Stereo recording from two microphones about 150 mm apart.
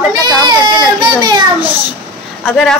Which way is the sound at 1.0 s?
30° right (ahead or behind).